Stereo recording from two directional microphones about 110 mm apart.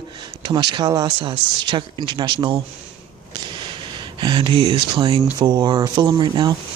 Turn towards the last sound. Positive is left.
turn(degrees=-40)  # may be behind; listen again after turning